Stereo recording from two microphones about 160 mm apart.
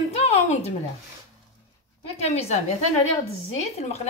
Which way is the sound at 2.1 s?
40° left (ahead or behind).